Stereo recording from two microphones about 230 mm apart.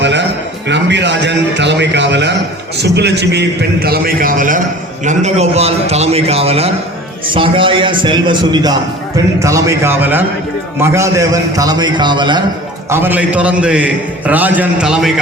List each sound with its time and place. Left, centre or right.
0.0 s music: right
0.7 s a man's voice: right; by 12.4 s centre
12.9 s a man's voice: centre